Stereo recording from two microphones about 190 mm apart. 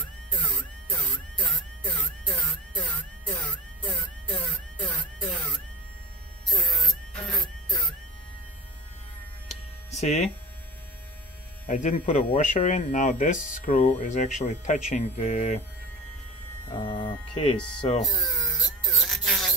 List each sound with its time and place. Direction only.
1.8 s speech: 5° left (ahead or behind)
3.3 s music: 5° left (ahead or behind)
6.4 s a sound: centre (ahead or behind)
9.5 s music: 35° left (ahead or behind)
11.6 s speech: 45° left (ahead or behind)
16.7 s speech: 25° left (ahead or behind)
18.0 s a sound: centre (ahead or behind)